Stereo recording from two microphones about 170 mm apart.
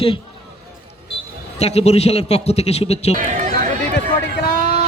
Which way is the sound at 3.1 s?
55° right (ahead or behind).